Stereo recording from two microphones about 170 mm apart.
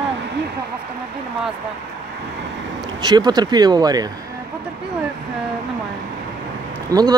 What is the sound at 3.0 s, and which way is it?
Speech, 25° right (ahead or behind).